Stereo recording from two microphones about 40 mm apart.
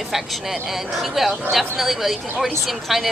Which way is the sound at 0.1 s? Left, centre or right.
Centre.